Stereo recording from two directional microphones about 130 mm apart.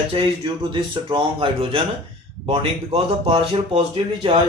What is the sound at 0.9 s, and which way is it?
Speech, 40° right (ahead or behind).